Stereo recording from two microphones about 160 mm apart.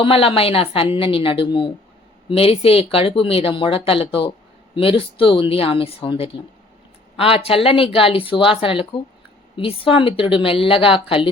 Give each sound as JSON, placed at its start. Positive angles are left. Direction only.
{"t": 0.0, "sound": "speech", "side_deg": 35}